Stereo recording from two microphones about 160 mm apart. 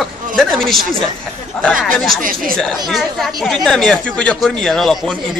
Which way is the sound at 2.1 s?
60° right (ahead or behind).